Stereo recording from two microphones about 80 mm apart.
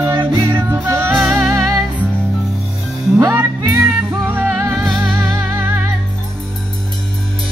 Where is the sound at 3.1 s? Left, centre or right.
Right.